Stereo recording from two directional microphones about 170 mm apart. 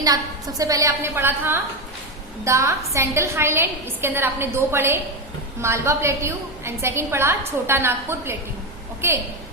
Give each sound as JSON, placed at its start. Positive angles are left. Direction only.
{"t": 0.0, "sound": "a woman's voice", "side_deg": -20}